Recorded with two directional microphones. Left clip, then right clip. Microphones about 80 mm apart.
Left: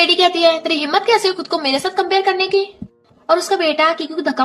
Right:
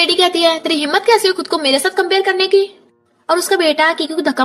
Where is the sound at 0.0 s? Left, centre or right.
Right.